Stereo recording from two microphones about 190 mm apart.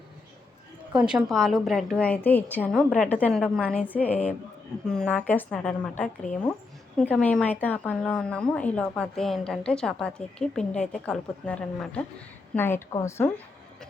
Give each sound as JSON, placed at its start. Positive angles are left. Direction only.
{"t": 0.9, "sound": "a woman's voice", "side_deg": -5}